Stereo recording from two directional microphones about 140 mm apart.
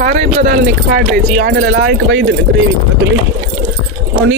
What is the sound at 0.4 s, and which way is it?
Speech, 80° right.